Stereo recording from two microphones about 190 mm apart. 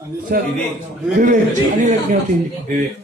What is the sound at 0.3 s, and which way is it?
Speech, 50° right (ahead or behind).